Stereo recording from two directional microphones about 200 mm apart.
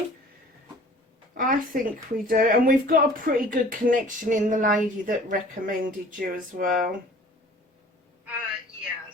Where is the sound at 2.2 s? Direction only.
45° right (ahead or behind).